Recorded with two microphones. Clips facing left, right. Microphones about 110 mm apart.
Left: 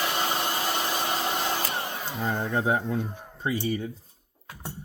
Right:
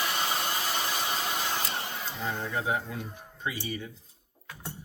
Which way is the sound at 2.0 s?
50° left (ahead or behind).